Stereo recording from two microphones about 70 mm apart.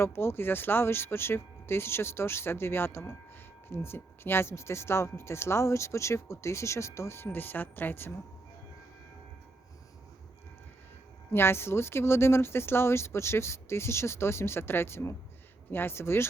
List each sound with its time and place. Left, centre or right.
0.0 s speech: left
11.3 s speech: left